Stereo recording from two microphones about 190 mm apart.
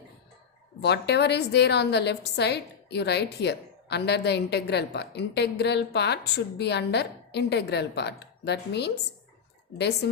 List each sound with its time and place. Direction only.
0.8 s a woman's voice: 60° left (ahead or behind)